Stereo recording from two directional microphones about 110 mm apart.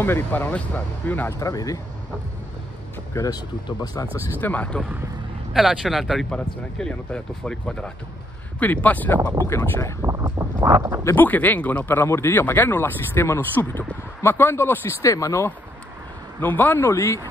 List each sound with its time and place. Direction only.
0.0 s speech: 20° left (ahead or behind)
1.4 s speech: 30° left (ahead or behind)
3.2 s speech: 35° left (ahead or behind)
4.4 s speech: 15° left (ahead or behind)
5.5 s speech: centre (ahead or behind); by 9.2 s 15° left (ahead or behind)
9.5 s speech: 25° left (ahead or behind)
10.0 s a sound: 30° right (ahead or behind)
11.1 s speech: 15° left (ahead or behind)
16.3 s speech: 15° left (ahead or behind)